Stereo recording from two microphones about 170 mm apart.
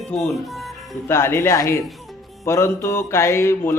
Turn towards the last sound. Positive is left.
turn(degrees=15)  # may be behind; listen again after turning